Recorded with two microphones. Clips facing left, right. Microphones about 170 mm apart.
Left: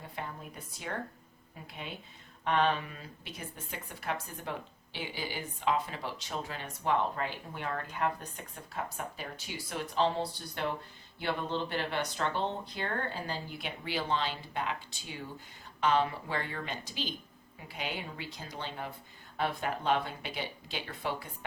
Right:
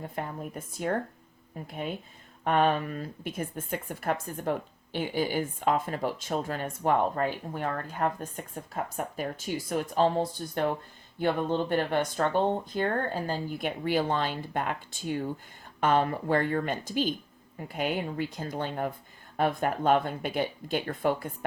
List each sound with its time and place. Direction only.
0.0 s speech: 45° right (ahead or behind)